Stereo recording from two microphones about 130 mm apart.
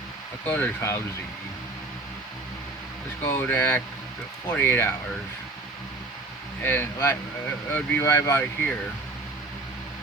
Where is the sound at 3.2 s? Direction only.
15° left (ahead or behind).